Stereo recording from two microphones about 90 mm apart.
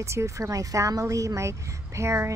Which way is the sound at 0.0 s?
35° right (ahead or behind).